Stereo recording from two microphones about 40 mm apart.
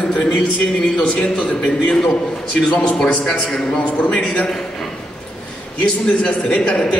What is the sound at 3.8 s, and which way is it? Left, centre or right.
Speech, left.